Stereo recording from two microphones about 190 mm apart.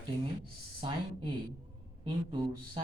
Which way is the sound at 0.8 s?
25° right (ahead or behind).